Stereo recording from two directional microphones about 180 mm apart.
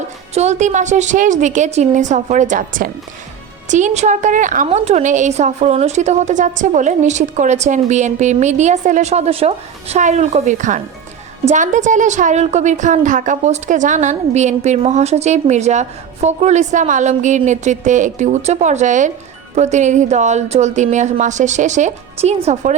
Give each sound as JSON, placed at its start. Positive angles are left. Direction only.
{"t": 0.3, "sound": "a woman's voice", "side_deg": -40}